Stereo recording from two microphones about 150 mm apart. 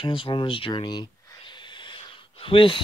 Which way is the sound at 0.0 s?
35° left (ahead or behind).